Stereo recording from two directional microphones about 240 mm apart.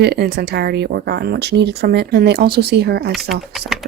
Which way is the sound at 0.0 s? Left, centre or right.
Right.